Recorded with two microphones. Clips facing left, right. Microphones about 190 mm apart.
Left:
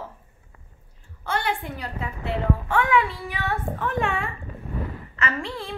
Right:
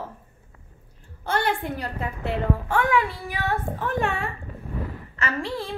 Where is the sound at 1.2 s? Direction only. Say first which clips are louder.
Right 2 dB; 40° right (ahead or behind).